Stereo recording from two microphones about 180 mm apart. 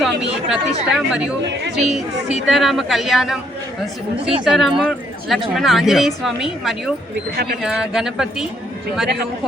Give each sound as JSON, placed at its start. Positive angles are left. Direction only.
{"t": 0.0, "sound": "speech", "side_deg": 0}
{"t": 4.4, "sound": "speech", "side_deg": 0}
{"t": 7.3, "sound": "speech", "side_deg": -60}
{"t": 7.6, "sound": "speech", "side_deg": -5}